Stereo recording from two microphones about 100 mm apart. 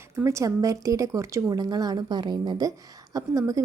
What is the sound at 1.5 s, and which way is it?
A woman's voice, 45° right (ahead or behind).